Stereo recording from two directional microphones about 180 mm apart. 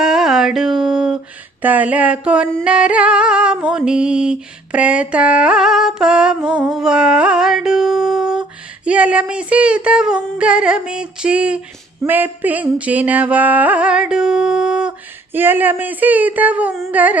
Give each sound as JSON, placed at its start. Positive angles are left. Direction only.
{"t": 0.0, "sound": "music", "side_deg": -5}
{"t": 2.6, "sound": "a sound", "side_deg": -5}
{"t": 12.0, "sound": "music", "side_deg": -10}